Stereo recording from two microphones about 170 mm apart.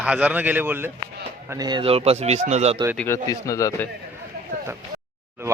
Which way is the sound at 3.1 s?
20° left (ahead or behind).